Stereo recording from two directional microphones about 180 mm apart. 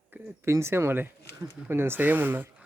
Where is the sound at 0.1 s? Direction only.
15° right (ahead or behind).